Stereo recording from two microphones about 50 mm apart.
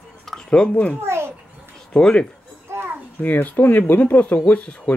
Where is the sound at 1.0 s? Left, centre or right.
Right.